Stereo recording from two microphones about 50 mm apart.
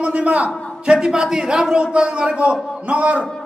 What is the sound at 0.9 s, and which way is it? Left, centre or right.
A man's voice, centre.